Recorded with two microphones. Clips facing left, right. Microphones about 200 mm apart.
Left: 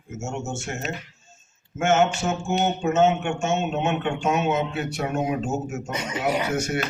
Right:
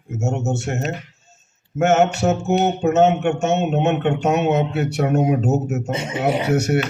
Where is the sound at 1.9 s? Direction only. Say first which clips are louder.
Right 4 dB; 65° right (ahead or behind).